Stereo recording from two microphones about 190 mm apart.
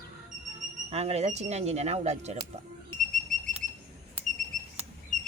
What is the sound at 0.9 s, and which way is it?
Speech, 35° right (ahead or behind).